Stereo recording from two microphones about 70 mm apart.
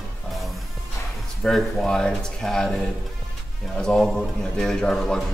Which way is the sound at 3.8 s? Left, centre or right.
Centre.